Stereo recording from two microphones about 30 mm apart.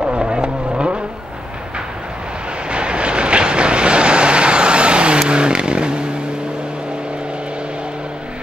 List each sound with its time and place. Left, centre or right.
0.0 s vehicle: right
2.7 s vehicle: right
5.3 s a sound: right